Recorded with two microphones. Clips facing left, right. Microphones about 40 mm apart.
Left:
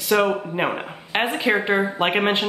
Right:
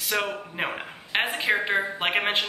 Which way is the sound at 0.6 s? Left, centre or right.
Centre.